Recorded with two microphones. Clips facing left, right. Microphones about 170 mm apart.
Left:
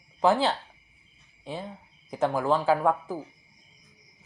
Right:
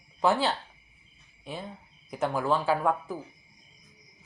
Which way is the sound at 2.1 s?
20° left (ahead or behind).